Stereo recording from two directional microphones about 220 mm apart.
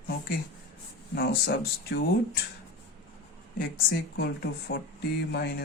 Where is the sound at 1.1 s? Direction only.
50° left (ahead or behind).